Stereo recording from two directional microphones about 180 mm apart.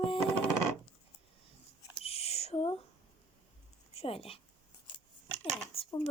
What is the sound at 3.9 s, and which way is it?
Speech, 30° left (ahead or behind).